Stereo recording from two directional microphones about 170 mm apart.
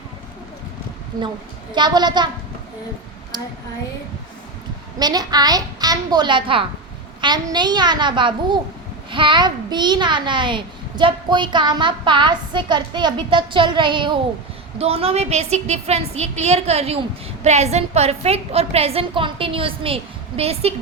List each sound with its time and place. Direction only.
1.7 s a child's voice: 25° right (ahead or behind)
3.3 s speech: 25° right (ahead or behind)
4.9 s a child's voice: 25° right (ahead or behind)